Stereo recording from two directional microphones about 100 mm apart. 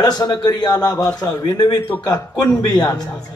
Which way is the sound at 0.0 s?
40° left (ahead or behind).